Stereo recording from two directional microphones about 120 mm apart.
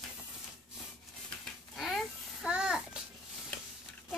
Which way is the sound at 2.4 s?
10° right (ahead or behind).